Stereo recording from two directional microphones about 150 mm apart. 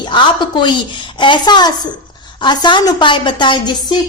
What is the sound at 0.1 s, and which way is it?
A woman's voice, 30° left (ahead or behind).